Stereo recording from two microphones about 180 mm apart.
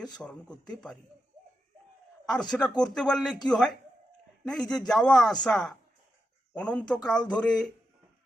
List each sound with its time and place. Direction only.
0.2 s speech: 5° left (ahead or behind)
2.4 s speech: 5° left (ahead or behind)
4.4 s speech: 5° left (ahead or behind)